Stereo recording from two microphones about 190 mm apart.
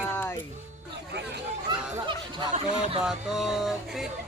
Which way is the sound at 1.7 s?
20° right (ahead or behind).